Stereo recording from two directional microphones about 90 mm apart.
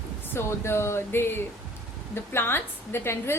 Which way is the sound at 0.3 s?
30° left (ahead or behind).